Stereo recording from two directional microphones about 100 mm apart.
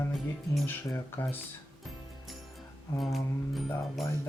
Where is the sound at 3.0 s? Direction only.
Centre (ahead or behind).